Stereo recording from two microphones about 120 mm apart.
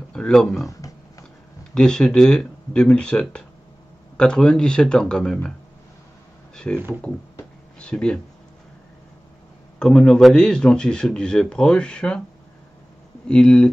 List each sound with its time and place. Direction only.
0.1 s speech: 5° left (ahead or behind)
0.7 s a sound: 30° left (ahead or behind)
1.7 s speech: 5° left (ahead or behind)
6.5 s speech: 5° left (ahead or behind)
7.8 s speech: 10° left (ahead or behind)
9.8 s a man's voice: 5° left (ahead or behind)
13.3 s speech: 10° left (ahead or behind)